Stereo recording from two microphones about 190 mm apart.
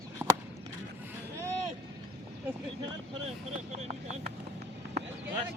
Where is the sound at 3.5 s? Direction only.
35° right (ahead or behind).